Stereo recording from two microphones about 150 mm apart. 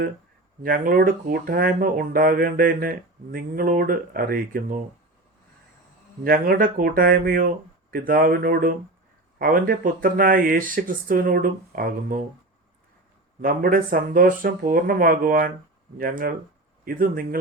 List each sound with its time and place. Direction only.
0.6 s speech: 70° right (ahead or behind)
6.2 s speech: 75° right (ahead or behind)
13.4 s speech: 70° right (ahead or behind)